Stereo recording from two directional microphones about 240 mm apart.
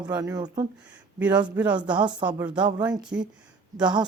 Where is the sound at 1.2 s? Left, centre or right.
Centre.